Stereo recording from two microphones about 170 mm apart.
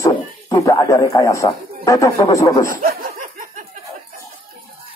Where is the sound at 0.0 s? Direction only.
20° left (ahead or behind).